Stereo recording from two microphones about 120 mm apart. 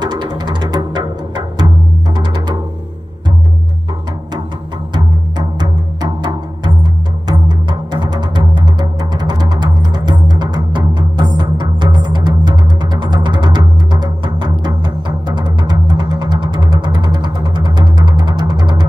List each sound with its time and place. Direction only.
0.0 s music: 35° right (ahead or behind)
5.6 s music: 35° right (ahead or behind)